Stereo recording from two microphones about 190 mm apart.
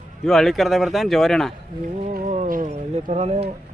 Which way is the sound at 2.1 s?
45° right (ahead or behind).